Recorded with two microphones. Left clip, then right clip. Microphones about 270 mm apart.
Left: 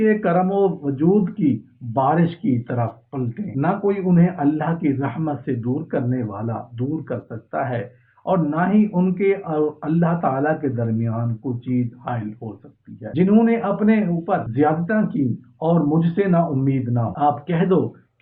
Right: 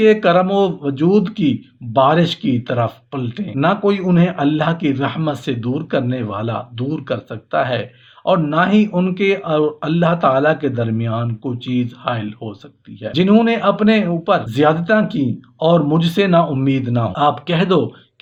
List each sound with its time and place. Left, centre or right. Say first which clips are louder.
0.0 s speech: right 6 dB; right